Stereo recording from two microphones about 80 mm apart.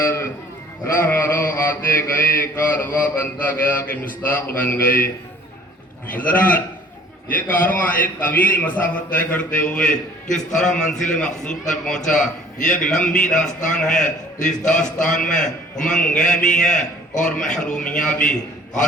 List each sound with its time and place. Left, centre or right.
0.0 s sheep: left
0.9 s a man's voice: left
6.1 s a man's voice: left